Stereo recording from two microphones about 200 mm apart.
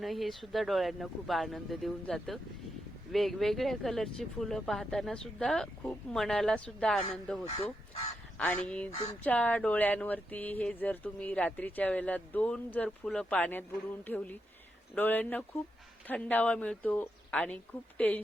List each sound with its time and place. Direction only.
0.0 s speech: centre (ahead or behind)
7.4 s fowl: 30° left (ahead or behind)
8.4 s speech: 5° left (ahead or behind)